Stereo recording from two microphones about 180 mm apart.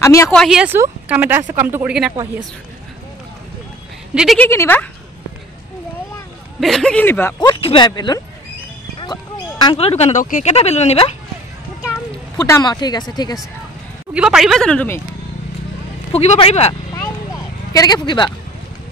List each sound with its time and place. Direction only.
0.0 s speech: 15° left (ahead or behind)
0.3 s speech: centre (ahead or behind)
4.1 s speech: 5° right (ahead or behind)
4.4 s speech: 10° left (ahead or behind)
6.6 s speech: 5° left (ahead or behind)
7.3 s speech: 25° left (ahead or behind)
9.0 s a sound: 25° left (ahead or behind)
10.2 s speech: 40° left (ahead or behind)
12.4 s speech: 20° left (ahead or behind)
14.1 s speech: 5° right (ahead or behind)
16.1 s speech: 35° left (ahead or behind)
16.9 s a sound: 20° left (ahead or behind)